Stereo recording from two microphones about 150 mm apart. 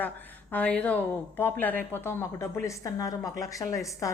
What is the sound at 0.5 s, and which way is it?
A woman's voice, 10° left (ahead or behind).